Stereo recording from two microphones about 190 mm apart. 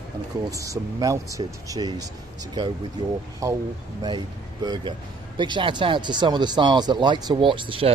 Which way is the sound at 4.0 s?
25° right (ahead or behind).